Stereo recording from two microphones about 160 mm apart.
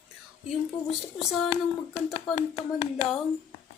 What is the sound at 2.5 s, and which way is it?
Speech, centre (ahead or behind).